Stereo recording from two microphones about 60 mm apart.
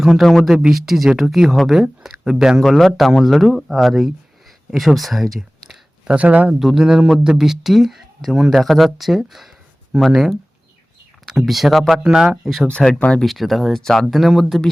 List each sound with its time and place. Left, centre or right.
0.0 s speech: centre
2.6 s speech: centre
6.1 s speech: right
6.5 s speech: centre
12.4 s speech: centre